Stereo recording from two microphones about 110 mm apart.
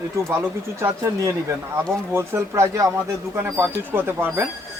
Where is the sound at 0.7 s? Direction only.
30° right (ahead or behind).